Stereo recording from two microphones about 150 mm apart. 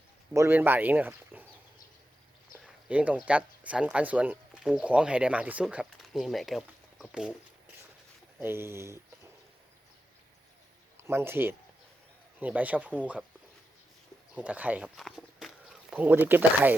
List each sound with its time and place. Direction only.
0.3 s speech: 15° right (ahead or behind)
2.6 s speech: 10° right (ahead or behind)
8.4 s speech: 15° right (ahead or behind)
10.9 s speech: 15° right (ahead or behind)
14.3 s speech: 10° right (ahead or behind)
14.9 s a sound: centre (ahead or behind)